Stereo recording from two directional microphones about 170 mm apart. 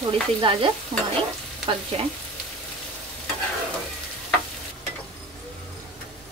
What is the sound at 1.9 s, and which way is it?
Speech, 35° right (ahead or behind).